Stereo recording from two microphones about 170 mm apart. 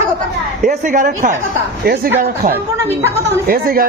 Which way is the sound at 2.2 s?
55° right (ahead or behind).